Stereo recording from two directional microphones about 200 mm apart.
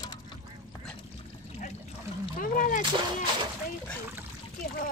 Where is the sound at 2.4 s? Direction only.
40° left (ahead or behind).